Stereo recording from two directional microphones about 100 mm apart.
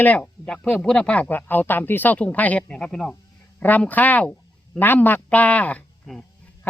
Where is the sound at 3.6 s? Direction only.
15° left (ahead or behind).